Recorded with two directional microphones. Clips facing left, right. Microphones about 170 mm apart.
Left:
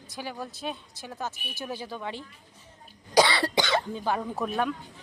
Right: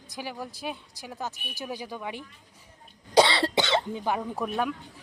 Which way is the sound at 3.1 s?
25° right (ahead or behind).